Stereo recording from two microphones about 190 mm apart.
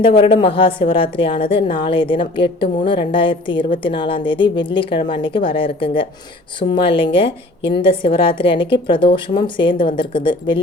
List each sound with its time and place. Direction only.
0.0 s a woman's voice: 30° left (ahead or behind)